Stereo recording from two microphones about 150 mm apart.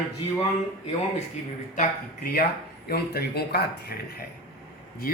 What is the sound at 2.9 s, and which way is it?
Speech, 90° left.